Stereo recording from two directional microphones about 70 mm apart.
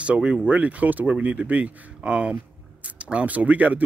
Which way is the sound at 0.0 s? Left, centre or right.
Centre.